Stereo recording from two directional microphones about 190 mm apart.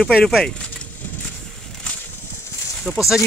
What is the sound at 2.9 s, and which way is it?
Speech, centre (ahead or behind).